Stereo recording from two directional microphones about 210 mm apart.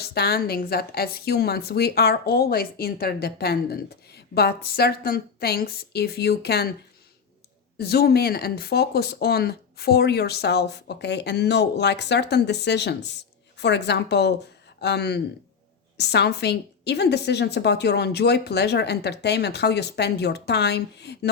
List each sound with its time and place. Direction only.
0.0 s a woman's voice: 50° left (ahead or behind)
7.8 s a woman's voice: 50° left (ahead or behind)